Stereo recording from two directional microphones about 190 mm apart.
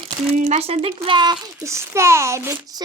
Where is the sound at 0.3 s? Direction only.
35° right (ahead or behind).